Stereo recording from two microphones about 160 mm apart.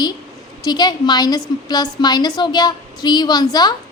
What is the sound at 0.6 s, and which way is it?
A woman's voice, 25° left (ahead or behind).